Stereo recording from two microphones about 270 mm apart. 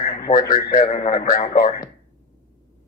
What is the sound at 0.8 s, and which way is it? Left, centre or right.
Speech, left.